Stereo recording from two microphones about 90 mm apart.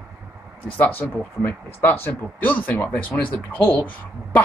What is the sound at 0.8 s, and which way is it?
Speech, 20° left (ahead or behind).